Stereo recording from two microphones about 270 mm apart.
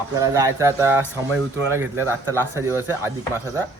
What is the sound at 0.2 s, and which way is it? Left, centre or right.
Speech, centre.